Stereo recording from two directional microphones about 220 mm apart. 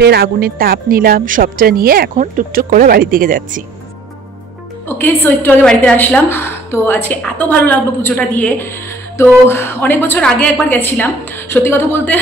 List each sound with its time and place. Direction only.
0.0 s speech: 45° right (ahead or behind)
4.8 s a woman's voice: 10° left (ahead or behind)